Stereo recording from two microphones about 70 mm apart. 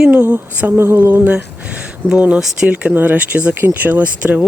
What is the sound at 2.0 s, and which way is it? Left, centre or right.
Speech, centre.